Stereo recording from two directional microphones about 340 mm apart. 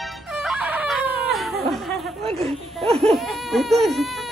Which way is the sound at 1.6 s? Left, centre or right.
Centre.